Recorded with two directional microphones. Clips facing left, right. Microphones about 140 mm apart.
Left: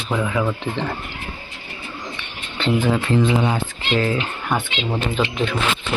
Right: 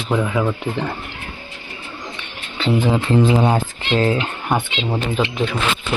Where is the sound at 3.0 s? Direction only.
35° right (ahead or behind).